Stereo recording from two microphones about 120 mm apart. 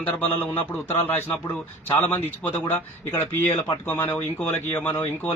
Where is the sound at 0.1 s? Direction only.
15° left (ahead or behind).